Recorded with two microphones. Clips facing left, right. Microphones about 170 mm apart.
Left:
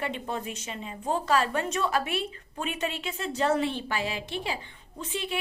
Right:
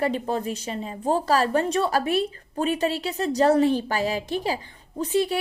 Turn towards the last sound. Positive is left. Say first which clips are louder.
# right 11 dB
turn(degrees=-40)  # may be behind; listen again after turning